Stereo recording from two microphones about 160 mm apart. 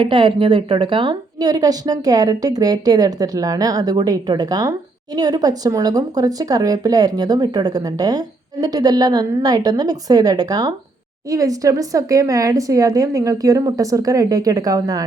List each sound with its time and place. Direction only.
0.0 s speech: 30° right (ahead or behind)